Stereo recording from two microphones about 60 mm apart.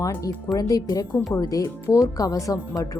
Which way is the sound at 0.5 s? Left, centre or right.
Left.